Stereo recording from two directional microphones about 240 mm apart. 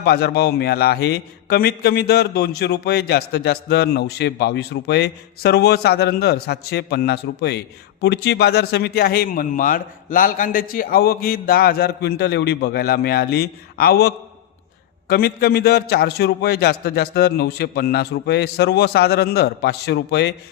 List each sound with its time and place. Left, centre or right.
0.0 s a man's voice: left